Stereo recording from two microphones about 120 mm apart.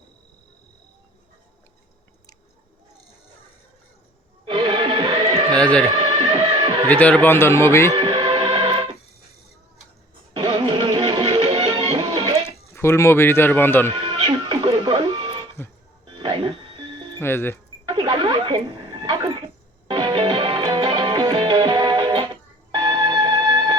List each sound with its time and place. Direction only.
4.4 s music: 45° right (ahead or behind)
5.3 s a sound: 50° right (ahead or behind)
5.5 s music: 10° left (ahead or behind)
6.0 s music: 40° right (ahead or behind)
6.8 s a man's voice: 10° left (ahead or behind)
7.9 s music: 40° right (ahead or behind)
10.3 s music: 45° right (ahead or behind)
12.7 s a man's voice: 20° left (ahead or behind)
13.9 s music: 40° right (ahead or behind)
17.2 s a man's voice: 20° left (ahead or behind)
17.8 s a sound: 45° right (ahead or behind)
19.9 s music: 45° right (ahead or behind)